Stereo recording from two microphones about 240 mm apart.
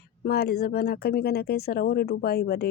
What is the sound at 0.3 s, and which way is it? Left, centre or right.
Speech, left.